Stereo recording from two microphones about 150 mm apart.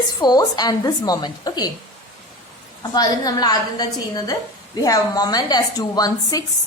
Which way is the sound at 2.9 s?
25° left (ahead or behind).